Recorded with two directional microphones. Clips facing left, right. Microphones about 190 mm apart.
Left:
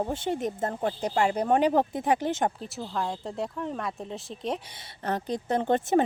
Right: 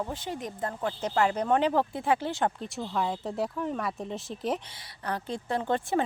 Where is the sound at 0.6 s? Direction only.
35° left (ahead or behind).